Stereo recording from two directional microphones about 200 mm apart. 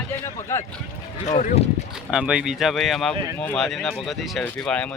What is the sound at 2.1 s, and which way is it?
Speech, 5° right (ahead or behind).